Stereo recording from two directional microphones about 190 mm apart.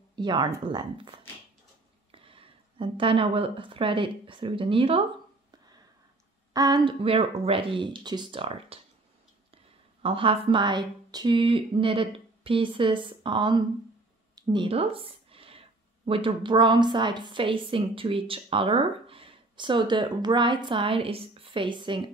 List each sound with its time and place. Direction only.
0.1 s a woman's voice: 25° right (ahead or behind)
6.5 s a woman's voice: 20° right (ahead or behind)
10.0 s a woman's voice: 30° right (ahead or behind)
14.3 s a sound: 25° right (ahead or behind)
16.1 s a woman's voice: 25° right (ahead or behind)